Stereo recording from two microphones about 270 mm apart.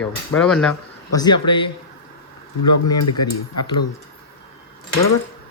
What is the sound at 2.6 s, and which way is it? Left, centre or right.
Speech, left.